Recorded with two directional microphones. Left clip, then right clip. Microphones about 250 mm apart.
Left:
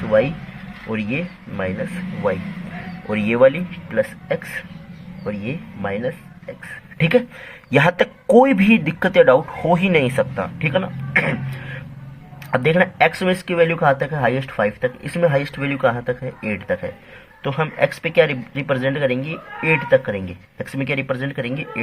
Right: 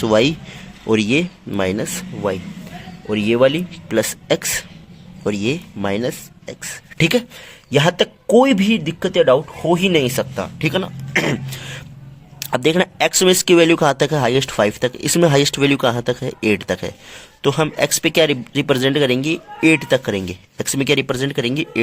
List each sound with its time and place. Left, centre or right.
0.9 s speech: right
3.1 s speech: right
7.7 s speech: right